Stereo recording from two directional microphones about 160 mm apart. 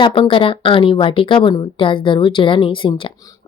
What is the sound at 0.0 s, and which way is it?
Speech, 35° left (ahead or behind).